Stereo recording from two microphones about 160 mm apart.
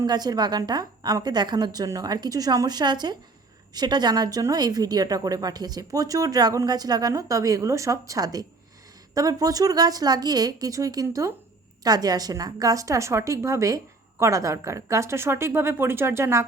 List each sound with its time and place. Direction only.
0.0 s a woman's voice: 25° right (ahead or behind)